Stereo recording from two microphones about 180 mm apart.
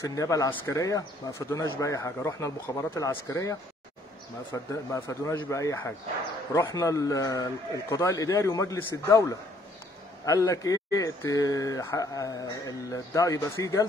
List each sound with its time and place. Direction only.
0.0 s a man's voice: 20° left (ahead or behind)